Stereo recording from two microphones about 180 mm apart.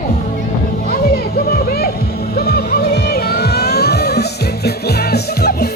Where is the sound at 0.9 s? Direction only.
55° left (ahead or behind).